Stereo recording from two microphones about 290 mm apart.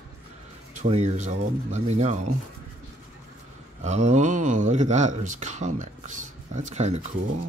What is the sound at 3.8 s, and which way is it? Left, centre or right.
Speech, right.